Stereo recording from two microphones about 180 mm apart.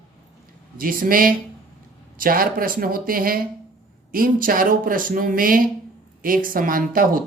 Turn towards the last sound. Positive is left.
turn(degrees=-50)  # may be behind; listen again after turning